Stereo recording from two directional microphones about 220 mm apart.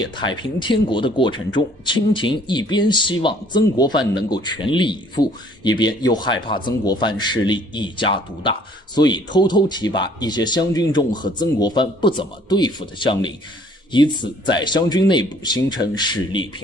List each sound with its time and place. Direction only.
0.0 s speech: 20° left (ahead or behind)